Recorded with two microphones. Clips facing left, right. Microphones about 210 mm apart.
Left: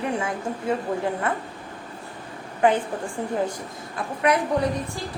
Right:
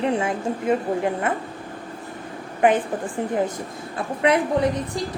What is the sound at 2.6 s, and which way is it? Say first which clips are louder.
Speech: right 2 dB; 20° right (ahead or behind).